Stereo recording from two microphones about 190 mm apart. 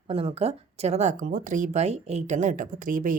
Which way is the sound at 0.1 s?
30° right (ahead or behind).